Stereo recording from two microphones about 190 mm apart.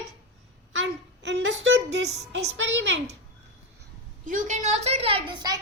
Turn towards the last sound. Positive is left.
turn(degrees=-25)  # may be behind; listen again after turning